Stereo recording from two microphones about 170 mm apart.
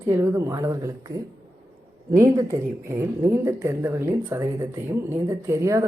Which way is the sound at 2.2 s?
15° right (ahead or behind).